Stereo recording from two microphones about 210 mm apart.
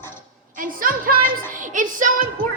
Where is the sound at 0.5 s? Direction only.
40° right (ahead or behind).